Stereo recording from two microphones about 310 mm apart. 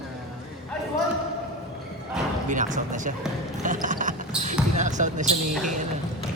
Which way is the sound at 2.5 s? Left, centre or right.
Right.